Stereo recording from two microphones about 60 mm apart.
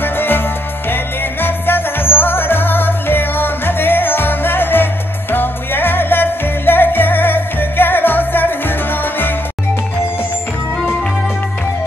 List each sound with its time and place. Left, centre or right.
0.0 s music: left